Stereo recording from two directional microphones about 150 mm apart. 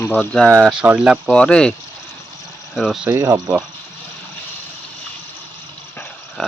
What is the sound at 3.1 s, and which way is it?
Speech, 20° right (ahead or behind).